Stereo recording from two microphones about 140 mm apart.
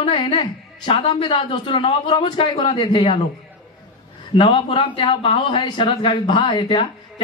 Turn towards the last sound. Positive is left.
turn(degrees=35)  # may be behind; listen again after turning